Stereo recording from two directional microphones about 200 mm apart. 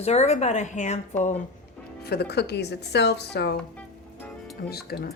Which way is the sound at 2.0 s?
55° left (ahead or behind).